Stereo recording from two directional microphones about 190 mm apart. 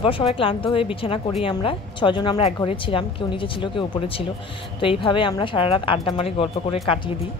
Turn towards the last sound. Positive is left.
turn(degrees=30)  # may be behind; listen again after turning